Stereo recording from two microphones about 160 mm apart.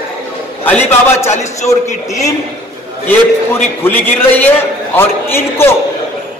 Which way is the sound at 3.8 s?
15° left (ahead or behind).